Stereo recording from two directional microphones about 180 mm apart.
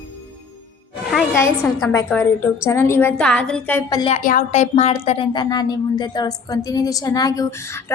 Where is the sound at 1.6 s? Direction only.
Centre (ahead or behind).